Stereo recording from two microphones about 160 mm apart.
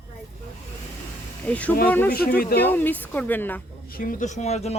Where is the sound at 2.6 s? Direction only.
10° left (ahead or behind).